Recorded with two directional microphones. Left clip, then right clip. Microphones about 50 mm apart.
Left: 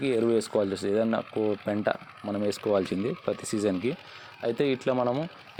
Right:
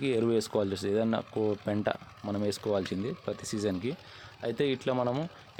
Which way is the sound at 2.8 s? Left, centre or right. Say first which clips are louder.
Left 5 dB; centre.